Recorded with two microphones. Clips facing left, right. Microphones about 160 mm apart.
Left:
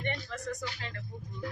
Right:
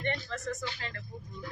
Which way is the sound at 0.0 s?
15° left (ahead or behind).